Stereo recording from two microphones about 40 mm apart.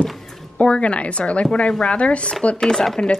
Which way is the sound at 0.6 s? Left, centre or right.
Left.